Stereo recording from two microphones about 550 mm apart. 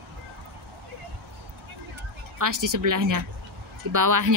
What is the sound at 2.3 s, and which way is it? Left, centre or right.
Speech, right.